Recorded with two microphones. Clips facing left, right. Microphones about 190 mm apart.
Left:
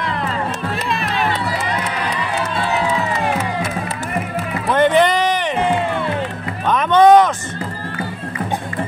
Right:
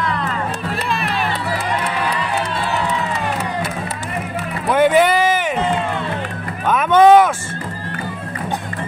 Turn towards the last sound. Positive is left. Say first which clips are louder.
# even
turn(degrees=-5)  # may be behind; listen again after turning